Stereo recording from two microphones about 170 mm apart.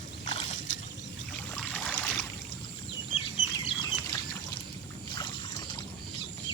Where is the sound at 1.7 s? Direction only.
5° left (ahead or behind).